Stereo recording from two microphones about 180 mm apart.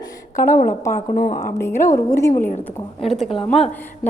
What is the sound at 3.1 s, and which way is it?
Speech, centre (ahead or behind).